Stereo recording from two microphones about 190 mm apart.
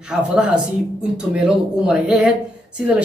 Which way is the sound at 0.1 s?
5° right (ahead or behind).